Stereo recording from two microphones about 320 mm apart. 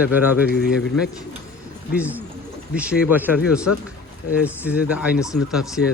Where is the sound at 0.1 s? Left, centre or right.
Centre.